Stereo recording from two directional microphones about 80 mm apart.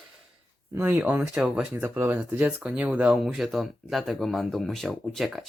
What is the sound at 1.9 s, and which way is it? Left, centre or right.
Speech, right.